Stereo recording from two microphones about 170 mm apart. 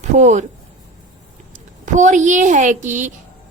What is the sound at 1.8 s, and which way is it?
Speech, 45° right (ahead or behind).